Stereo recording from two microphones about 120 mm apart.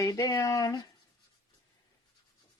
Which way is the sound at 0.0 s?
30° left (ahead or behind).